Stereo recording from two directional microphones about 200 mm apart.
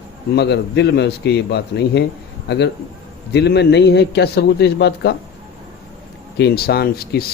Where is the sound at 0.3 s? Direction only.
55° left (ahead or behind).